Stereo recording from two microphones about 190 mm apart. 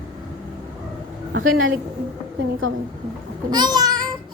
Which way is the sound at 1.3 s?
90° right.